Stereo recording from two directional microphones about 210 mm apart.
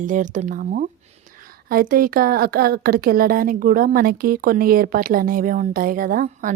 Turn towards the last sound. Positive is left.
turn(degrees=-40)  # may be behind; listen again after turning